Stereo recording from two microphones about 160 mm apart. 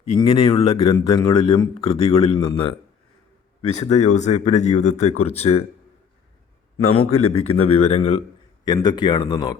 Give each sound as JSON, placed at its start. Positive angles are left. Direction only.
{"t": 0.2, "sound": "a man's voice", "side_deg": 35}
{"t": 3.8, "sound": "speech", "side_deg": 45}
{"t": 6.9, "sound": "a man's voice", "side_deg": 40}
{"t": 8.6, "sound": "speech", "side_deg": 25}